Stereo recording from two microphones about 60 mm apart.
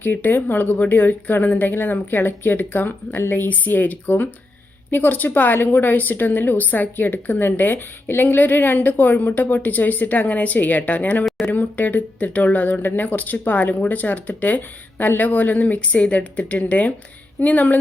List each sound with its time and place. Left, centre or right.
0.0 s a woman's voice: left
11.3 s speech: centre
11.5 s speech: left